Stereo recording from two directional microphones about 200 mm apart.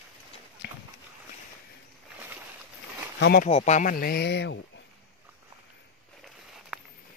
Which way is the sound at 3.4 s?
35° left (ahead or behind).